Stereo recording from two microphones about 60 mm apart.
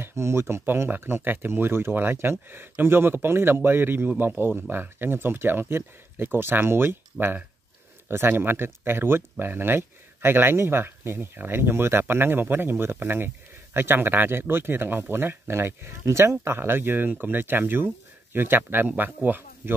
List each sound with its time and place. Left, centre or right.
0.0 s speech: right